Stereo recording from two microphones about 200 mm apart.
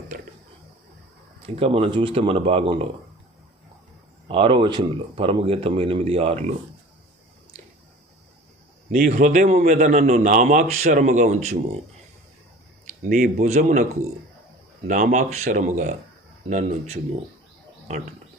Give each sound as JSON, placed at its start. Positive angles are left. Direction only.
{"t": 1.5, "sound": "speech", "side_deg": -30}
{"t": 4.3, "sound": "speech", "side_deg": -25}
{"t": 8.9, "sound": "a man's voice", "side_deg": -40}
{"t": 12.9, "sound": "a man's voice", "side_deg": -40}
{"t": 14.8, "sound": "a man's voice", "side_deg": -40}